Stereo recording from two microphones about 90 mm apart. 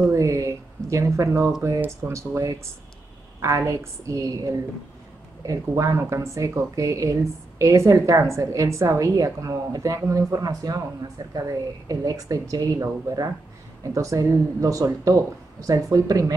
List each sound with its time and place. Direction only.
0.1 s a sound: 35° right (ahead or behind)
1.8 s speech: 30° right (ahead or behind)
13.9 s speech: 35° right (ahead or behind)